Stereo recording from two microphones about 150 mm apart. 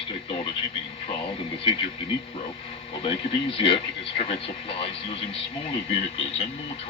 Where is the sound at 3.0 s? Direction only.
40° left (ahead or behind).